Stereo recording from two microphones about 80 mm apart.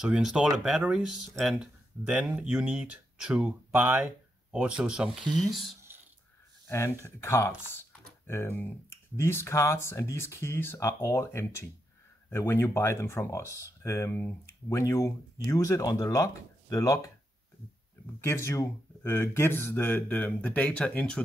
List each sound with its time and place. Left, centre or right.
0.0 s speech: centre
5.5 s speech: centre
6.7 s speech: left
18.2 s speech: left
19.0 s speech: left; by 21.2 s centre